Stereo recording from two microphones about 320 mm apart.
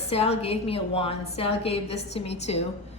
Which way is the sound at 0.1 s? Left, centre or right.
Centre.